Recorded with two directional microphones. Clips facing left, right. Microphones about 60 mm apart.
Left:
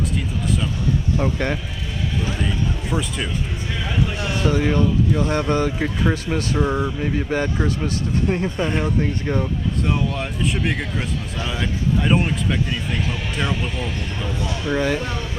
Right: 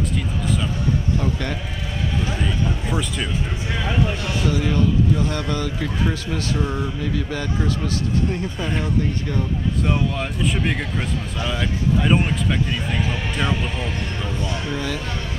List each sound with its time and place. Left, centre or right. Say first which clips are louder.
1.1 s speech: left 2 dB; left
2.4 s a man's voice: right 1 dB; centre
4.2 s speech: left 2 dB; left
7.0 s speech: left 3 dB; left
8.5 s speech: left 3 dB; centre
9.8 s a man's voice: right 1 dB; centre
14.4 s speech: left 6 dB; left